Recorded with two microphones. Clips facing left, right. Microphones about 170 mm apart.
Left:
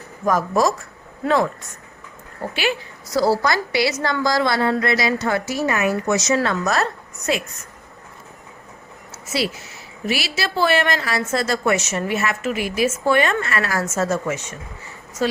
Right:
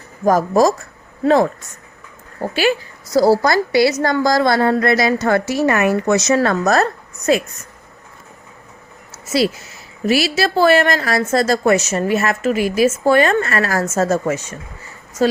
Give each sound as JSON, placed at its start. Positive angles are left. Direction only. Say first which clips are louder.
{"t": 0.3, "sound": "a woman's voice", "louder": "right 5 dB", "side_deg": -40}
{"t": 2.5, "sound": "a woman's voice", "louder": "right 6 dB", "side_deg": -40}
{"t": 9.1, "sound": "a sound", "louder": "right 7 dB", "side_deg": -40}
{"t": 10.1, "sound": "a woman's voice", "louder": "right 8 dB", "side_deg": -40}